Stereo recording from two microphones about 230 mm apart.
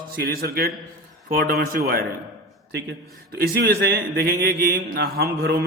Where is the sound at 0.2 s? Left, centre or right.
Right.